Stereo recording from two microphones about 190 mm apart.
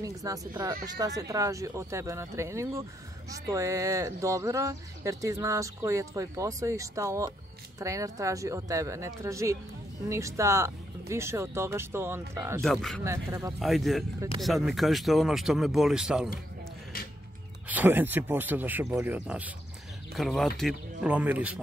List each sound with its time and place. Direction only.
0.0 s speech: 20° right (ahead or behind)
12.6 s speech: centre (ahead or behind)
13.0 s speech: 15° right (ahead or behind)
13.6 s speech: centre (ahead or behind)
17.6 s speech: 10° right (ahead or behind)